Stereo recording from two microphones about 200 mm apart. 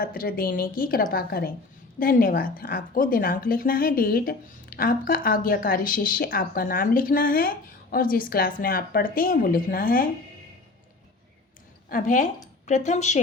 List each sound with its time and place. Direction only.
0.0 s a woman's voice: 45° left (ahead or behind)
11.9 s speech: 40° left (ahead or behind)